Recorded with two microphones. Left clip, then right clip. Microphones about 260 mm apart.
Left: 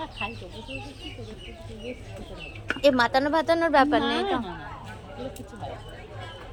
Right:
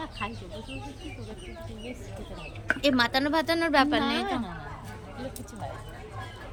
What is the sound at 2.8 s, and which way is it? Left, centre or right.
Speech, centre.